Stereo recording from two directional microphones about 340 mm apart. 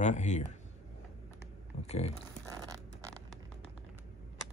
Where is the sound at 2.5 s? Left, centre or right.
Centre.